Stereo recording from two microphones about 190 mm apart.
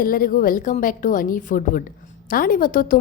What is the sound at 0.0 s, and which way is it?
A woman's voice, 50° left (ahead or behind).